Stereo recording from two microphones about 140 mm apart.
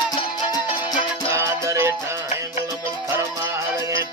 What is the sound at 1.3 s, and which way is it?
Music, 20° right (ahead or behind).